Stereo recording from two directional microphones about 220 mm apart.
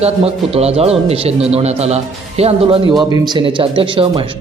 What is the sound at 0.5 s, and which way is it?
Speech, 25° right (ahead or behind).